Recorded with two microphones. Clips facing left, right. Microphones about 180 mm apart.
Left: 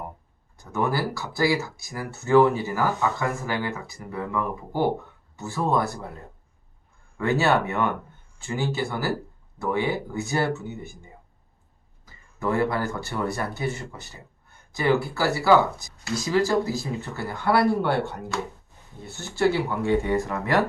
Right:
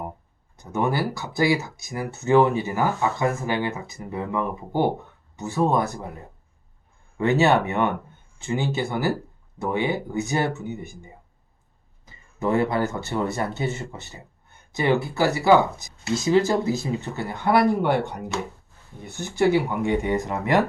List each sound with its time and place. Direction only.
0.5 s speech: 20° right (ahead or behind)